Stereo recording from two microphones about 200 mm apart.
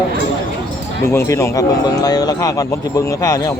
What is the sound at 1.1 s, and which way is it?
Speech, 15° left (ahead or behind).